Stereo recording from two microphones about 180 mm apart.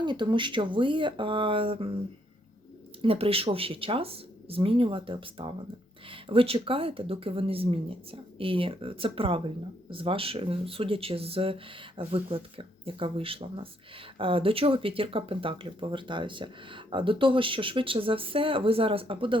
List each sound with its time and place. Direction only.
0.0 s speech: 25° right (ahead or behind)
3.0 s speech: 30° right (ahead or behind)